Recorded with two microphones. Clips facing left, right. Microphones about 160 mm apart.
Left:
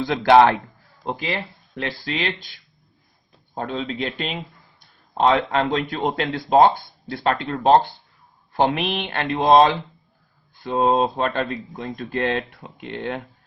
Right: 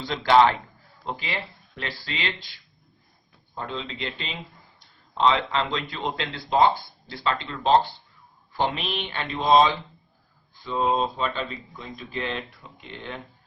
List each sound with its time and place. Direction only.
0.1 s speech: 60° left (ahead or behind)
1.1 s speech: 45° left (ahead or behind)
3.5 s speech: 55° left (ahead or behind)